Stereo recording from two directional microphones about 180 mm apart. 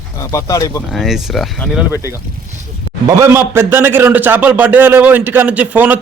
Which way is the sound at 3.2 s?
15° right (ahead or behind).